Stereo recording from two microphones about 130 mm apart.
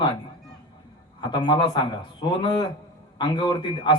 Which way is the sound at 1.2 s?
35° left (ahead or behind).